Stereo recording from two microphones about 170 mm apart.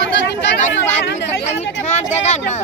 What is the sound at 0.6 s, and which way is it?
Speech, 40° left (ahead or behind).